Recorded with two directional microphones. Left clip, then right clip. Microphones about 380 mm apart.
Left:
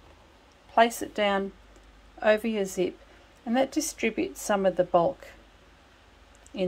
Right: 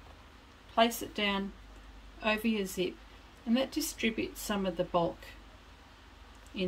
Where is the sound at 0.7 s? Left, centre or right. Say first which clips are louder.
Left 6 dB; centre.